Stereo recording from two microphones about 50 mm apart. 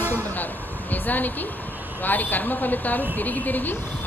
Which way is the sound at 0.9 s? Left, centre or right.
Left.